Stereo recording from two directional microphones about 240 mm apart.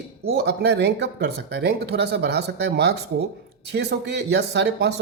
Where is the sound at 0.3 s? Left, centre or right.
Right.